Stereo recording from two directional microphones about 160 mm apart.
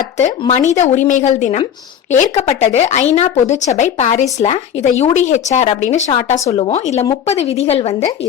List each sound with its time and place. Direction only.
0.2 s a woman's voice: 45° left (ahead or behind)